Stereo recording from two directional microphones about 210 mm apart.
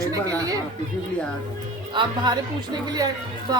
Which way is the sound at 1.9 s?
20° right (ahead or behind).